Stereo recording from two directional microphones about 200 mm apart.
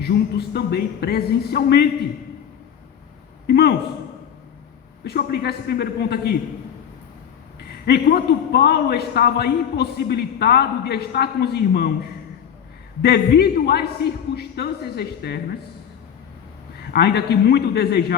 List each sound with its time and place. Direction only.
0.0 s a man's voice: 55° left (ahead or behind)
3.4 s speech: 55° left (ahead or behind)
5.0 s a man's voice: 50° left (ahead or behind)
7.9 s a man's voice: 50° left (ahead or behind)
13.0 s a man's voice: 55° left (ahead or behind)
16.9 s a man's voice: 55° left (ahead or behind)